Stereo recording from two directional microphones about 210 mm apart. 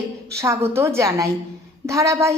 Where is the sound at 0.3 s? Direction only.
15° right (ahead or behind).